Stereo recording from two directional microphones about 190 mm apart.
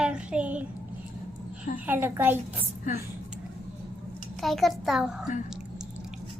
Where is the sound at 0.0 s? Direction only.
5° right (ahead or behind).